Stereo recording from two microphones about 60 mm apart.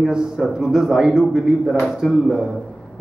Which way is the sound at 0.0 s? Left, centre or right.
Centre.